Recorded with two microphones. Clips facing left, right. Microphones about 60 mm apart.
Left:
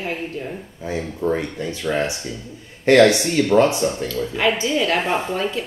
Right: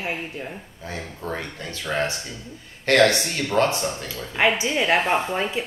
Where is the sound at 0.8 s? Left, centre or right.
Centre.